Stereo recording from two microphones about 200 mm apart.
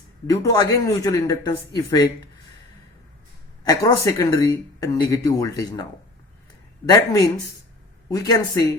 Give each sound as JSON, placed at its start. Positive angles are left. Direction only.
{"t": 0.4, "sound": "speech", "side_deg": 15}
{"t": 3.6, "sound": "speech", "side_deg": 20}